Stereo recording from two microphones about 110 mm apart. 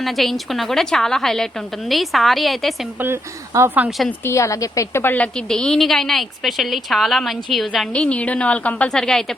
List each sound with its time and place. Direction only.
0.0 s a woman's voice: centre (ahead or behind)
3.0 s speech: 25° right (ahead or behind)
3.8 s a woman's voice: centre (ahead or behind)
4.2 s a woman's voice: 25° left (ahead or behind); by 7.9 s centre (ahead or behind)
7.9 s a woman's voice: 10° left (ahead or behind)